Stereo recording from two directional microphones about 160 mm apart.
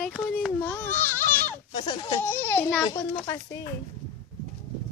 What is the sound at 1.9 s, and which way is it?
Speech, 25° left (ahead or behind).